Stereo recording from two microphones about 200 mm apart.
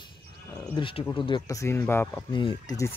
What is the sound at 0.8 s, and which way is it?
Speech, 25° left (ahead or behind).